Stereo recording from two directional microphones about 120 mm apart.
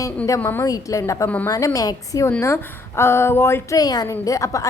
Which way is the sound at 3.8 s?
30° left (ahead or behind).